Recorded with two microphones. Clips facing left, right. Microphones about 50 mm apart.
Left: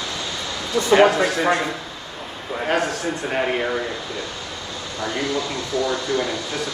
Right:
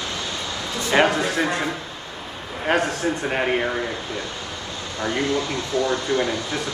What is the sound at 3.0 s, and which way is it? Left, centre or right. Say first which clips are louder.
Speech: even; centre.